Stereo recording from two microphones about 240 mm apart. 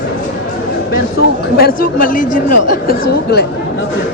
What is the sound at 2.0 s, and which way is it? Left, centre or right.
A man's voice, left.